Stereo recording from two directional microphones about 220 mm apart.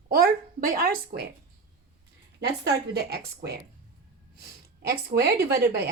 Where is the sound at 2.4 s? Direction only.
50° right (ahead or behind).